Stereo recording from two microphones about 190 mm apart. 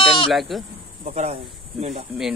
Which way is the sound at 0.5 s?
Centre (ahead or behind).